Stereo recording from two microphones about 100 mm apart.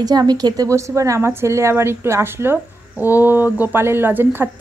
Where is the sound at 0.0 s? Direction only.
40° right (ahead or behind).